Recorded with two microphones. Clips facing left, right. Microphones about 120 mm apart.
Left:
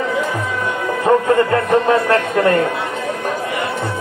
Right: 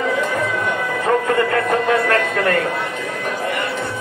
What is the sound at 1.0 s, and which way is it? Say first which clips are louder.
Speech: left 4 dB; 25° left (ahead or behind).